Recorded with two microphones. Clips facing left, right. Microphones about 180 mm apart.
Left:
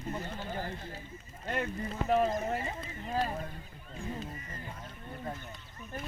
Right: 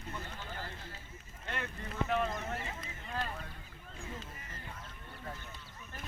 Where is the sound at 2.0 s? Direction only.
35° left (ahead or behind).